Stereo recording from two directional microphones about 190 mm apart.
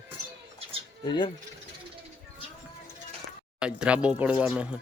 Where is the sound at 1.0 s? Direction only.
20° left (ahead or behind).